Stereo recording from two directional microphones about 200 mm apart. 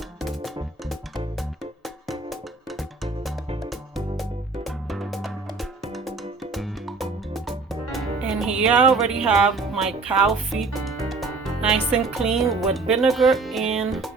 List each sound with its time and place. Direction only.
0.2 s music: centre (ahead or behind)
9.2 s speech: 5° right (ahead or behind)